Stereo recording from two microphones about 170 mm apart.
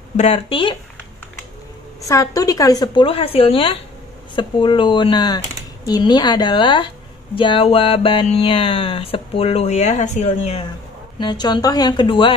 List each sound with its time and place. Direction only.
0.2 s speech: 35° left (ahead or behind)
2.0 s a woman's voice: 20° left (ahead or behind); by 10.6 s 40° left (ahead or behind)
11.1 s a woman's voice: 25° left (ahead or behind)